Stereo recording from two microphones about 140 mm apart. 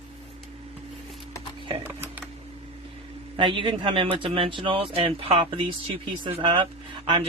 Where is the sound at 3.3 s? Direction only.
35° right (ahead or behind).